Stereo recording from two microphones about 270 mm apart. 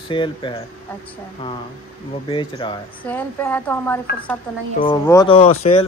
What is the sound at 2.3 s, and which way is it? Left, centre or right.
Speech, centre.